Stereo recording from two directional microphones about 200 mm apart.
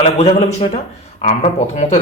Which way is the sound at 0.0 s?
30° left (ahead or behind).